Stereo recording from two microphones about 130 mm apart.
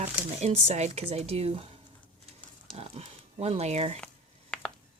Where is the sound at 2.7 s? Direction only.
55° right (ahead or behind).